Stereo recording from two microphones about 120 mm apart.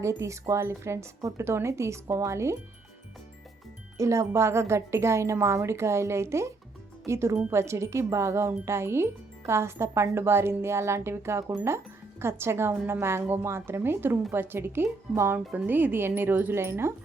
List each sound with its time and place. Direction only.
0.0 s speech: 25° right (ahead or behind)
3.9 s speech: 25° right (ahead or behind)